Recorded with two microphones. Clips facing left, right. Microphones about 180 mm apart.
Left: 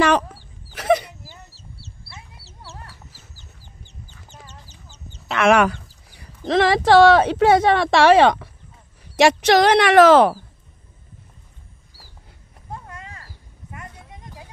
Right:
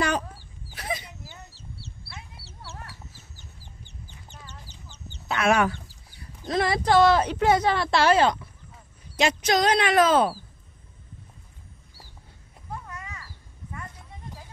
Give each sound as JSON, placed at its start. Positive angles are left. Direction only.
{"t": 0.0, "sound": "speech", "side_deg": 85}
{"t": 0.7, "sound": "a sound", "side_deg": 80}
{"t": 5.3, "sound": "speech", "side_deg": 90}
{"t": 9.2, "sound": "speech", "side_deg": 75}